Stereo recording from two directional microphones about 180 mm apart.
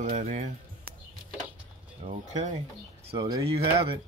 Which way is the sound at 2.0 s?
35° right (ahead or behind).